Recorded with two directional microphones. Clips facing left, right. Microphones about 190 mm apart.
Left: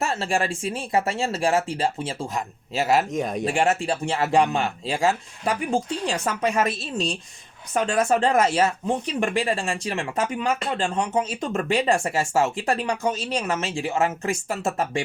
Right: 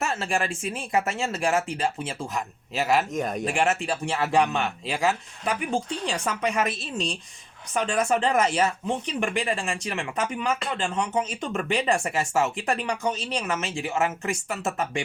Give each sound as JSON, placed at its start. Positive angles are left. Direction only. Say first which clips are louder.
{"t": 0.0, "sound": "speech", "louder": "left 3 dB", "side_deg": 30}
{"t": 3.1, "sound": "speech", "louder": "left 2 dB", "side_deg": 0}
{"t": 3.4, "sound": "speech", "louder": "left 4 dB", "side_deg": 30}